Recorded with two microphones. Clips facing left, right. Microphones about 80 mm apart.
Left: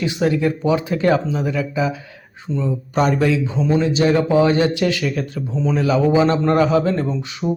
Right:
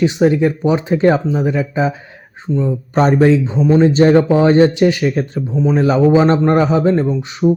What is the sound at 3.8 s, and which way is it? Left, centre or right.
Speech, right.